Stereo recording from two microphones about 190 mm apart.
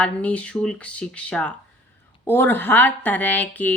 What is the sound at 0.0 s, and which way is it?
A woman's voice, 5° left (ahead or behind).